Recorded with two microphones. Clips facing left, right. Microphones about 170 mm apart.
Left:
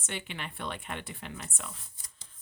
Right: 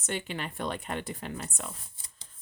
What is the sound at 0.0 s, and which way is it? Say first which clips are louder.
Speech: right 5 dB; 40° right (ahead or behind).